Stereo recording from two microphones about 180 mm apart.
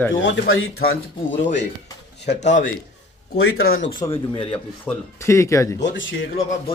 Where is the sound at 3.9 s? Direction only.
25° left (ahead or behind).